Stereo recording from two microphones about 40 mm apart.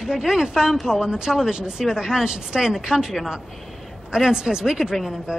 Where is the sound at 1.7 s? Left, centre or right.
Centre.